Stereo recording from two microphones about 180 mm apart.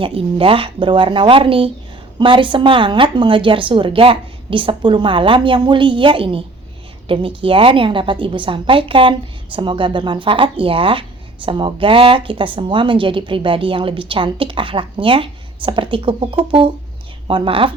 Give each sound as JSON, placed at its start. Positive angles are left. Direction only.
{"t": 0.0, "sound": "speech", "side_deg": -30}